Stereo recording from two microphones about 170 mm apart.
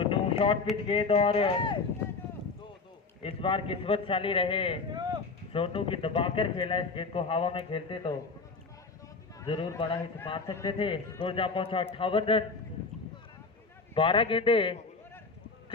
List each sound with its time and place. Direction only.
0.0 s a sound: 30° left (ahead or behind)
0.9 s a man's voice: 35° left (ahead or behind)
3.2 s a man's voice: 35° left (ahead or behind)
4.9 s a sound: 25° right (ahead or behind)
5.5 s a man's voice: 30° left (ahead or behind)
9.5 s a man's voice: 30° left (ahead or behind)
10.4 s a man's voice: 20° left (ahead or behind)
10.8 s a man's voice: 30° left (ahead or behind)
13.9 s a man's voice: 30° left (ahead or behind)